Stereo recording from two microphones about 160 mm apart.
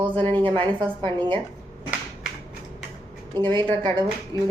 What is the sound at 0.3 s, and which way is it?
Speech, 30° right (ahead or behind).